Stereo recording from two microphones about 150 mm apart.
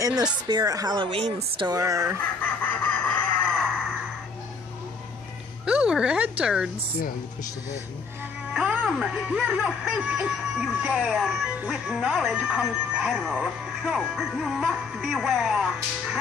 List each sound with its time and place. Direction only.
0.0 s a woman's voice: 25° right (ahead or behind)
1.8 s a woman's voice: 20° right (ahead or behind)
2.8 s a sound: 10° left (ahead or behind)
5.7 s speech: 5° right (ahead or behind)
8.5 s speech: 5° right (ahead or behind)